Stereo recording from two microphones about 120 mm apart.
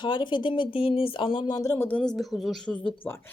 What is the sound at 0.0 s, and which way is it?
Speech, 40° left (ahead or behind).